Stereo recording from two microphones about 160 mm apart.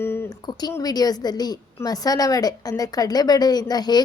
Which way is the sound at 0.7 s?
25° left (ahead or behind).